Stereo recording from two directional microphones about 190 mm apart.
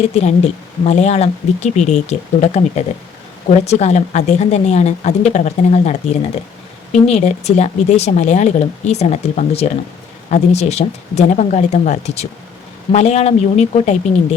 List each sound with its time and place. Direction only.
0.1 s speech: 35° left (ahead or behind)